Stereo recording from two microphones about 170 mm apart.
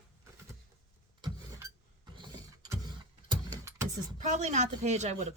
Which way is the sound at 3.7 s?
15° right (ahead or behind).